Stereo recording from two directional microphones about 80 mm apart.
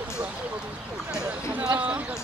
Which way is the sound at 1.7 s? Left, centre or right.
Centre.